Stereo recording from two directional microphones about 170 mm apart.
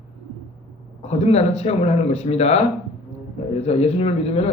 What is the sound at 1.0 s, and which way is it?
Speech, 40° left (ahead or behind).